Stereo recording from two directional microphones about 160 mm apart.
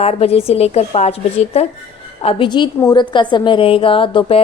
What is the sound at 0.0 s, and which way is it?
A woman's voice, 40° left (ahead or behind).